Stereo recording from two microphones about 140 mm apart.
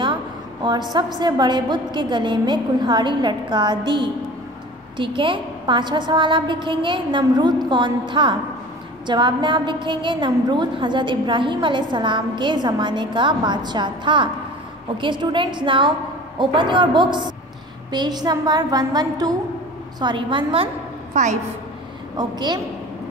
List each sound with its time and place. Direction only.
0.0 s a sound: 35° right (ahead or behind)
0.9 s a woman's voice: 30° right (ahead or behind)
21.1 s a woman's voice: 60° right (ahead or behind)
22.1 s a woman's voice: 30° right (ahead or behind)